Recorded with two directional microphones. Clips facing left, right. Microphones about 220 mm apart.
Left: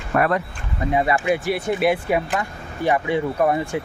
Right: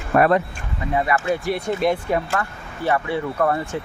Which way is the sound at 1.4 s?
5° left (ahead or behind).